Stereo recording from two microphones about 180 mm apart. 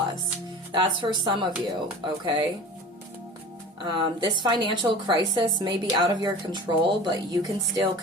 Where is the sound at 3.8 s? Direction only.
25° right (ahead or behind).